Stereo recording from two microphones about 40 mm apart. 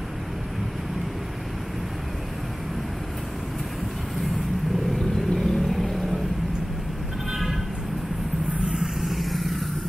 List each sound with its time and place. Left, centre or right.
4.9 s vehicle: centre
8.6 s vehicle: centre
9.1 s vehicle: centre